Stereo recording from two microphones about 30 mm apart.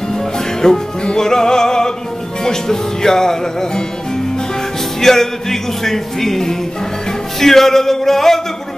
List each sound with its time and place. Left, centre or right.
0.1 s music: centre
5.0 s music: centre